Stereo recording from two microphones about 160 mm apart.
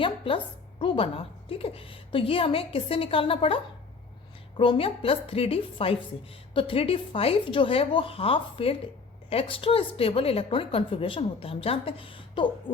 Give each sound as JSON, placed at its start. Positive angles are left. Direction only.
{"t": 0.0, "sound": "a woman's voice", "side_deg": 35}